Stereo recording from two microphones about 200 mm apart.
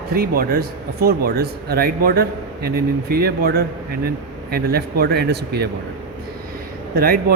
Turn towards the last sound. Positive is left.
turn(degrees=-50)  # may be behind; listen again after turning